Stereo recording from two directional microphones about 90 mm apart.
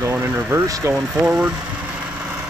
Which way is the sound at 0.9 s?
10° right (ahead or behind).